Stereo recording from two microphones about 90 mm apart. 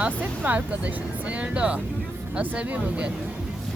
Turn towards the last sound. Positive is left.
turn(degrees=-15)  # may be behind; listen again after turning